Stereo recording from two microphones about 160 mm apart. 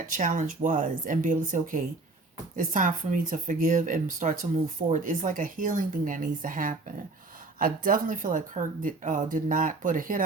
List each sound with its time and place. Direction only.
0.1 s speech: 55° right (ahead or behind)